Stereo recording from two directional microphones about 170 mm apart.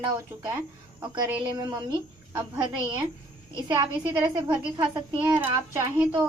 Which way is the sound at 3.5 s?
25° right (ahead or behind).